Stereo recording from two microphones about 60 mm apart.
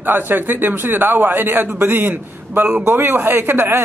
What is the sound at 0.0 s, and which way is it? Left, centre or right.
Speech, right.